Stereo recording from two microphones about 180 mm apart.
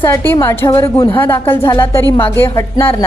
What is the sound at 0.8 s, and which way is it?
Speech, 25° left (ahead or behind).